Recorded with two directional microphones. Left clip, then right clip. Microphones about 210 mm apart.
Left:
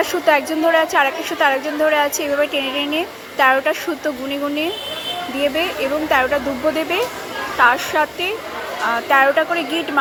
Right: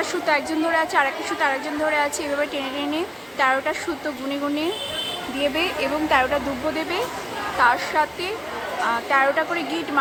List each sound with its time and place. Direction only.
0.3 s a woman's voice: 15° left (ahead or behind)
5.4 s a woman's voice: 5° left (ahead or behind)